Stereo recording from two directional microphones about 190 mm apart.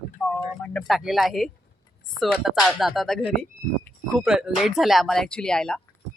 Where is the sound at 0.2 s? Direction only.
5° left (ahead or behind).